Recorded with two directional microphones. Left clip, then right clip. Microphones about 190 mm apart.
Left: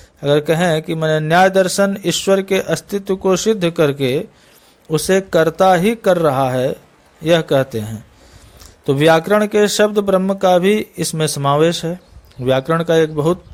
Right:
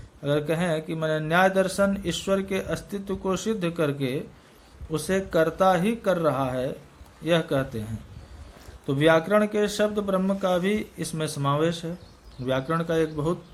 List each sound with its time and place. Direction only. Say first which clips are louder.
0.2 s speech: left 11 dB; 50° left (ahead or behind)
8.9 s speech: left 8 dB; 50° left (ahead or behind)